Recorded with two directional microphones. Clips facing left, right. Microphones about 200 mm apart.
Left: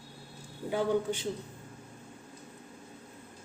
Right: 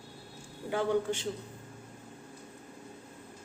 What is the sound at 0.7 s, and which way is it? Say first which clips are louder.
Speech: left 1 dB; 10° left (ahead or behind).